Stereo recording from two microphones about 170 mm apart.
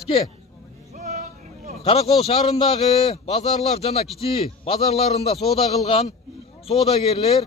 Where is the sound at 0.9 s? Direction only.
45° right (ahead or behind).